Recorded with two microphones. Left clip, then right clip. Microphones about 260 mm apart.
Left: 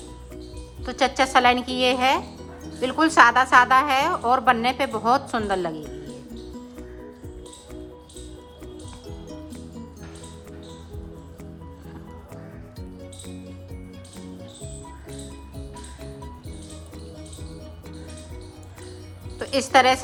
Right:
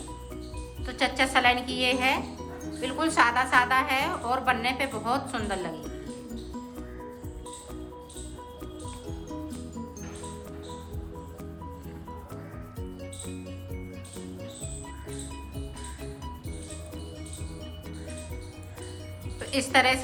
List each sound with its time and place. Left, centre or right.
0.9 s a woman's voice: centre
19.4 s music: centre